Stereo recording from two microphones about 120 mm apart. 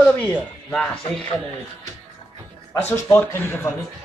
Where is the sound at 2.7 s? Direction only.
15° left (ahead or behind).